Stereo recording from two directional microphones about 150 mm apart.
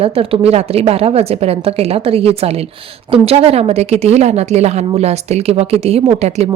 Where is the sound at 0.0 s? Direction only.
40° right (ahead or behind).